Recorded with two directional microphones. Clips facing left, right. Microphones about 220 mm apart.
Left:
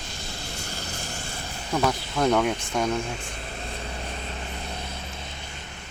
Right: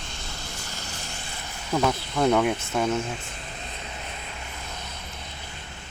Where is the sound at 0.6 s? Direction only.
35° left (ahead or behind).